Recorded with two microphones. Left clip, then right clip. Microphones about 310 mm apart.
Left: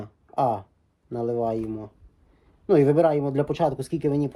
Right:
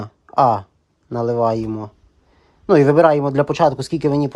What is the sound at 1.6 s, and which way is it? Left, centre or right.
Speech, right.